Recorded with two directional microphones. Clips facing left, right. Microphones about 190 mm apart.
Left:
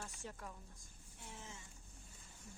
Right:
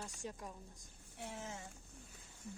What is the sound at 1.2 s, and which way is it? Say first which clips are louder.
Speech: right 8 dB; 75° right (ahead or behind).